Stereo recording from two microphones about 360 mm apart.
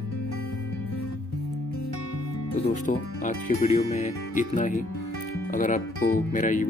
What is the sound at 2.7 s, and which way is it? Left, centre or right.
Speech, left.